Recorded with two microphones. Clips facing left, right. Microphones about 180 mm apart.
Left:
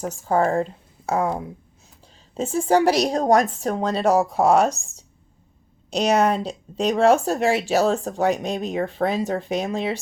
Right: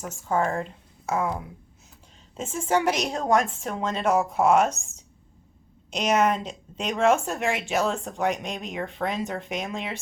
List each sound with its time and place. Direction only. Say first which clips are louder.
0.0 s a woman's voice: left 5 dB; 35° left (ahead or behind)
2.3 s speech: left 6 dB; 35° left (ahead or behind)